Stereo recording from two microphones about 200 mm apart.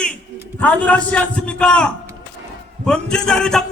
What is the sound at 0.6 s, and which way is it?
A man's voice, 5° left (ahead or behind).